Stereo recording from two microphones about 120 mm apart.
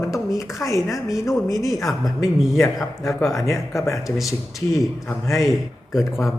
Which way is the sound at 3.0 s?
25° left (ahead or behind).